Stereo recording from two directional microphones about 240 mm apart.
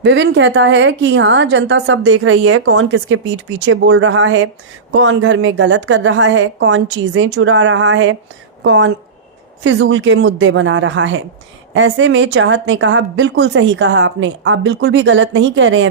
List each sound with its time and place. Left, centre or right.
0.0 s a woman's voice: right